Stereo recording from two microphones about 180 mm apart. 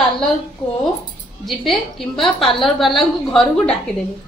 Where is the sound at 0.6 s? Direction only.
30° left (ahead or behind).